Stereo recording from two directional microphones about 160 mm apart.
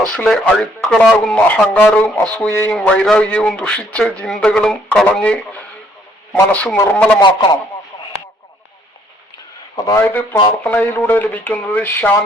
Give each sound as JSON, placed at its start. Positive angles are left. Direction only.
{"t": 0.1, "sound": "speech", "side_deg": 5}
{"t": 9.7, "sound": "speech", "side_deg": 20}